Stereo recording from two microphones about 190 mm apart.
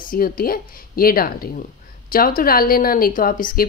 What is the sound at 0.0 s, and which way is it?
A woman's voice, 50° left (ahead or behind).